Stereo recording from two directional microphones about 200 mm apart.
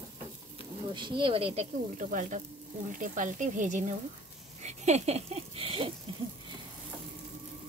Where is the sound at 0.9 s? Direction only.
25° right (ahead or behind).